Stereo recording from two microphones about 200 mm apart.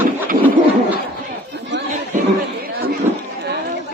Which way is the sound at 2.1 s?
40° right (ahead or behind).